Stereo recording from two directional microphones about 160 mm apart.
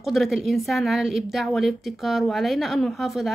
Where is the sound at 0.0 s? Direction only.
Centre (ahead or behind).